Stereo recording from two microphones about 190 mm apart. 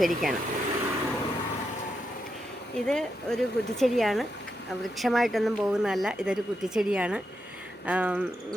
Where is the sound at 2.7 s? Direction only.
5° left (ahead or behind).